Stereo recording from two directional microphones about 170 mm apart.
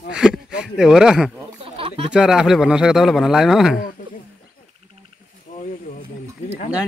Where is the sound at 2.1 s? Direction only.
5° right (ahead or behind).